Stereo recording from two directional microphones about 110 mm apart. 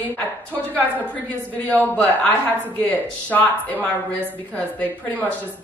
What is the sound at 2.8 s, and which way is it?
Speech, 15° left (ahead or behind).